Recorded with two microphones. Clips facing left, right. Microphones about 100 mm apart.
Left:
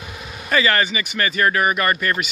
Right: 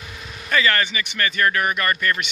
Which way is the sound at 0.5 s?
10° left (ahead or behind).